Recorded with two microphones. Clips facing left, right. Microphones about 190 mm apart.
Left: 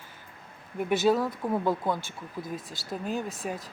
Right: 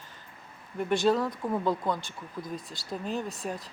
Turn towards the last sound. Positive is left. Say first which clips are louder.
# left 1 dB
turn(degrees=0)  # may be behind; listen again after turning